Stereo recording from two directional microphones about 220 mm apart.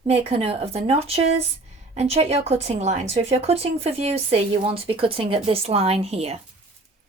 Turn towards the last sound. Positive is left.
turn(degrees=-25)  # may be behind; listen again after turning